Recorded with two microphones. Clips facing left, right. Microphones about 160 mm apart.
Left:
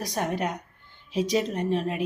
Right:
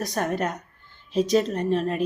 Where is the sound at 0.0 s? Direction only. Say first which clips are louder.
Right 2 dB; 15° left (ahead or behind).